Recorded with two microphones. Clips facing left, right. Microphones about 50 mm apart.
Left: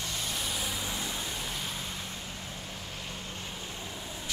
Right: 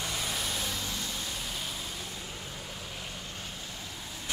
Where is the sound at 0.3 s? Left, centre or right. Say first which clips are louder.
Even; centre.